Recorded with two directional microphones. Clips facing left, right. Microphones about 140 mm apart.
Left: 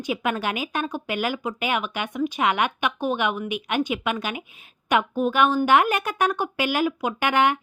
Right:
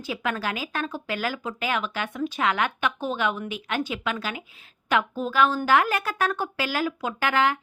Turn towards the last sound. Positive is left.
turn(degrees=20)  # may be behind; listen again after turning